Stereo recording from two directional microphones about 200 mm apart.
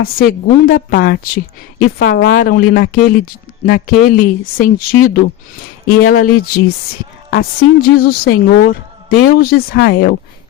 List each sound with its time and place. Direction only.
0.0 s speech: 45° left (ahead or behind)